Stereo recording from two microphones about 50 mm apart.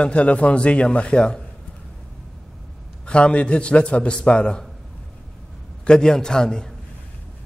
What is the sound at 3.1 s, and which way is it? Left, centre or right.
A man's voice, left.